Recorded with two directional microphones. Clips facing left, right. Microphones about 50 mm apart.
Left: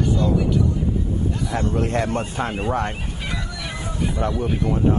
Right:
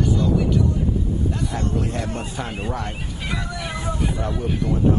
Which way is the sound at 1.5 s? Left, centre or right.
Left.